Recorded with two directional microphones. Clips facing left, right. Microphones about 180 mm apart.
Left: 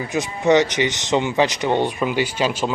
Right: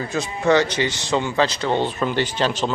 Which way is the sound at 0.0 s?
15° left (ahead or behind).